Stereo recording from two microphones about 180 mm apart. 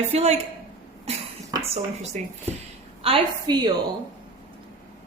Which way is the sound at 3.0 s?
30° right (ahead or behind).